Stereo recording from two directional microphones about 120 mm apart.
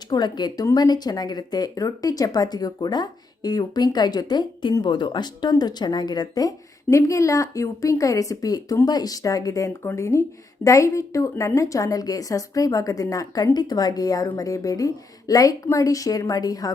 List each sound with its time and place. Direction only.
0.1 s a woman's voice: 35° left (ahead or behind)